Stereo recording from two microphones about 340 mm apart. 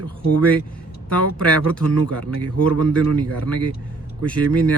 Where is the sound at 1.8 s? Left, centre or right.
Right.